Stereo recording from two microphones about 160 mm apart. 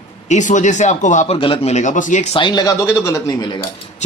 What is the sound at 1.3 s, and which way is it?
Speech, 35° left (ahead or behind).